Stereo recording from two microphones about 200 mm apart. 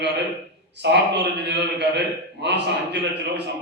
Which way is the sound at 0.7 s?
60° right (ahead or behind).